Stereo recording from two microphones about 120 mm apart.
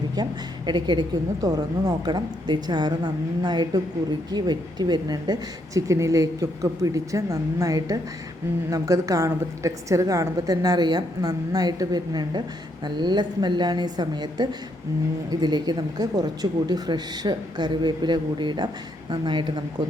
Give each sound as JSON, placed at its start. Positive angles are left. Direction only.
{"t": 0.2, "sound": "a woman's voice", "side_deg": -40}